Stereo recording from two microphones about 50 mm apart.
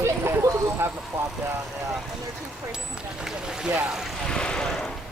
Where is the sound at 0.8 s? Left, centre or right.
Right.